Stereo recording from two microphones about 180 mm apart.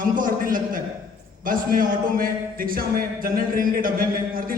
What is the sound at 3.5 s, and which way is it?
Speech, 50° right (ahead or behind).